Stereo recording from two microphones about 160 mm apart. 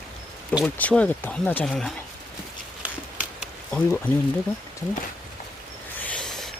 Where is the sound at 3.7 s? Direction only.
10° left (ahead or behind).